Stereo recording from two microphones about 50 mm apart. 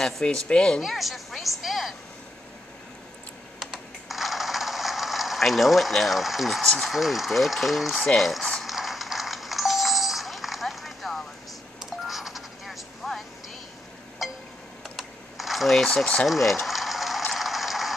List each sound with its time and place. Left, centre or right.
0.0 s speech: centre
0.7 s a woman's voice: centre
3.5 s computer keyboard: centre
6.6 s speech: centre
6.9 s a woman's voice: centre
8.2 s music: centre
11.8 s telephone dialing: centre
14.2 s a sound: centre
15.0 s typing: centre
15.7 s speech: centre
16.3 s a sound: centre